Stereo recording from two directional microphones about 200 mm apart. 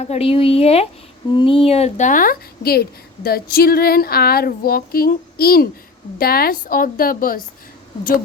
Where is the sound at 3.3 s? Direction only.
50° left (ahead or behind).